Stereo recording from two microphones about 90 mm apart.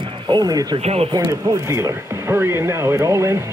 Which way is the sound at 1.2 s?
30° right (ahead or behind).